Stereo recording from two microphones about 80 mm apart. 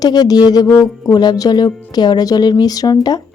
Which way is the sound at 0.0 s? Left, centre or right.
Left.